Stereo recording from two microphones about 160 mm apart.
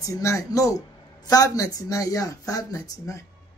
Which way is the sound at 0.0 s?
20° left (ahead or behind).